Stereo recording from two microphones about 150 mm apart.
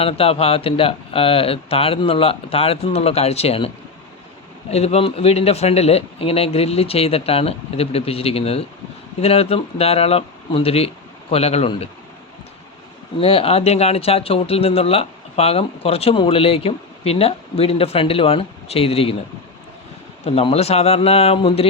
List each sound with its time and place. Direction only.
0.0 s speech: 40° left (ahead or behind)
4.7 s speech: 45° left (ahead or behind)
13.1 s speech: 40° left (ahead or behind)
20.2 s speech: 45° left (ahead or behind)